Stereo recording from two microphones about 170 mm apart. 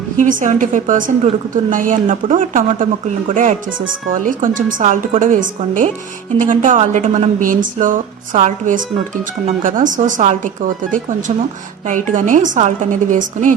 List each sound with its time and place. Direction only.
0.2 s a woman's voice: 50° right (ahead or behind)